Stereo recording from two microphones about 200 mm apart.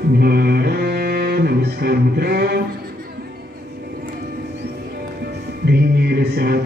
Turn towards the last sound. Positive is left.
turn(degrees=-50)  # may be behind; listen again after turning